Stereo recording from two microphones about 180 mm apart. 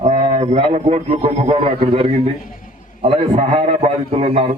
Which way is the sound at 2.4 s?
50° left (ahead or behind).